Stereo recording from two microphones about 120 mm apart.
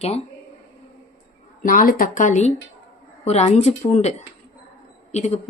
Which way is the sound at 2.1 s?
85° left.